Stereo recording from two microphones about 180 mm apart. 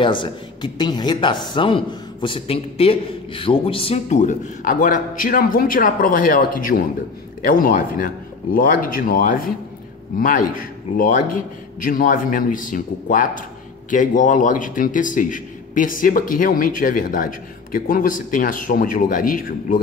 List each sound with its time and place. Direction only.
0.0 s a woman's voice: 25° left (ahead or behind); by 19.8 s 50° left (ahead or behind)